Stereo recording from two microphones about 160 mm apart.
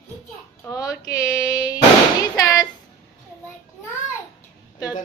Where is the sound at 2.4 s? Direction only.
20° left (ahead or behind).